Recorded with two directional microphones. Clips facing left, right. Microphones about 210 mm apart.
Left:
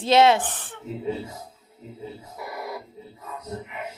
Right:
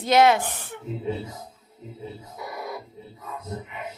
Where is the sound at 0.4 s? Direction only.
10° right (ahead or behind).